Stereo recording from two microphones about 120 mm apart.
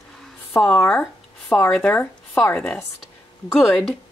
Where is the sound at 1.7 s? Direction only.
5° left (ahead or behind).